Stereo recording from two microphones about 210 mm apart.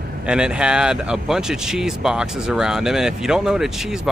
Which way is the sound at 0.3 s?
5° right (ahead or behind).